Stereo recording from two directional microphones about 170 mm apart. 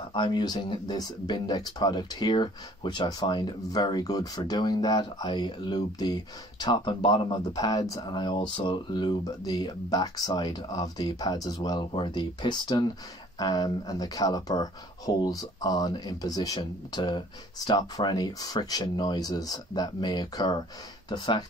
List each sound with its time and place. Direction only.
0.1 s speech: 25° left (ahead or behind)